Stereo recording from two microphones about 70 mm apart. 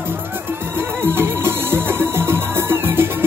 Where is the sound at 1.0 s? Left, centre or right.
Right.